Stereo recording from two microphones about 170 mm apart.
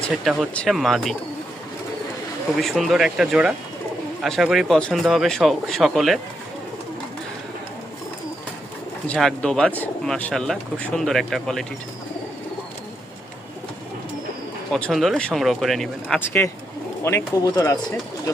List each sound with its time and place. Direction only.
0.3 s speech: centre (ahead or behind)
2.6 s speech: centre (ahead or behind)
9.0 s speech: 5° left (ahead or behind)
14.7 s speech: 5° left (ahead or behind)
16.2 s speech: 15° left (ahead or behind)